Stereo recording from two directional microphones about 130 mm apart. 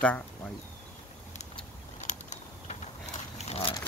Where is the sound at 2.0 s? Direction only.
65° left (ahead or behind).